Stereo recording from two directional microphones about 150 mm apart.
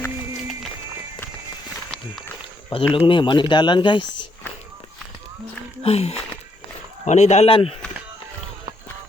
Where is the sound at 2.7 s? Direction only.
40° left (ahead or behind).